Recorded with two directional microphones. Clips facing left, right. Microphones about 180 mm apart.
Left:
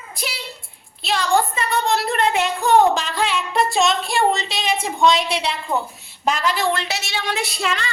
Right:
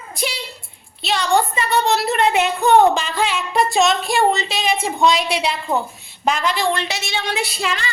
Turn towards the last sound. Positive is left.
turn(degrees=0)  # may be behind; listen again after turning